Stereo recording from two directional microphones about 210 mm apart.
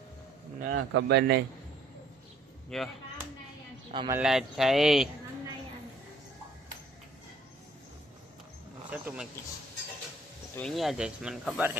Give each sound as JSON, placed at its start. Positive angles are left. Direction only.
{"t": 0.7, "sound": "a man's voice", "side_deg": -50}
{"t": 2.6, "sound": "speech", "side_deg": 0}
{"t": 3.9, "sound": "speech", "side_deg": -20}
{"t": 4.2, "sound": "speech", "side_deg": 0}
{"t": 8.9, "sound": "speech", "side_deg": -5}
{"t": 10.6, "sound": "speech", "side_deg": 0}